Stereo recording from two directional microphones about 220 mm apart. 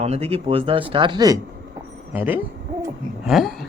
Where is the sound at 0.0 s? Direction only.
30° right (ahead or behind).